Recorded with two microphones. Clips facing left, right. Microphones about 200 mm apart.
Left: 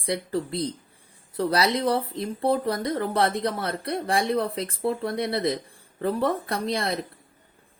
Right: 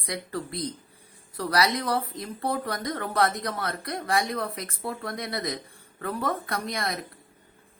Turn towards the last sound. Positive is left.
turn(degrees=30)  # may be behind; listen again after turning